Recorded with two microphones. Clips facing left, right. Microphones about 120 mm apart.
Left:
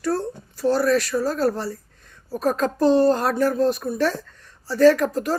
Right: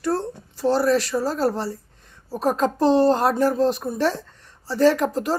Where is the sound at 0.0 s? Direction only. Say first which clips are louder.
Even; 25° right (ahead or behind).